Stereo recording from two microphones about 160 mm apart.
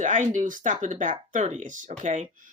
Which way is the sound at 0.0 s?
50° right (ahead or behind).